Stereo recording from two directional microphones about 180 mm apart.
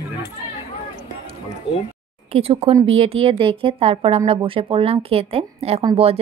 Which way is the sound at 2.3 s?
35° right (ahead or behind).